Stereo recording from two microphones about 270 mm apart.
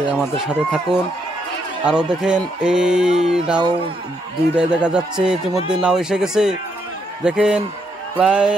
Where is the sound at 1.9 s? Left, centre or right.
Centre.